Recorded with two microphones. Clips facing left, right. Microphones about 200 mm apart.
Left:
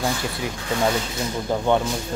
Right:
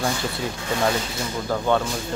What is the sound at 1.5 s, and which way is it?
Speech, 20° left (ahead or behind).